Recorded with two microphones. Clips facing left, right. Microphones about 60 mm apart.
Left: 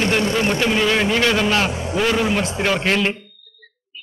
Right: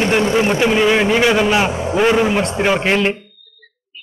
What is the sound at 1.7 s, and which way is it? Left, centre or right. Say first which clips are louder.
Speech: right 5 dB; centre.